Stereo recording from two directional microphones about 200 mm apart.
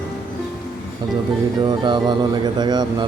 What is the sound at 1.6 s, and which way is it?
Speech, 25° right (ahead or behind).